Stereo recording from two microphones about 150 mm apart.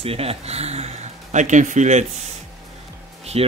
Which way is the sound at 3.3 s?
40° right (ahead or behind).